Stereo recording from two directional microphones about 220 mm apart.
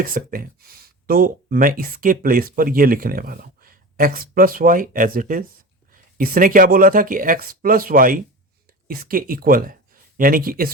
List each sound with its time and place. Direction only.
0.0 s speech: 40° right (ahead or behind)